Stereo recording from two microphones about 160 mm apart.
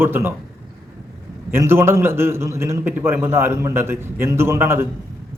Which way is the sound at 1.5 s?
15° right (ahead or behind).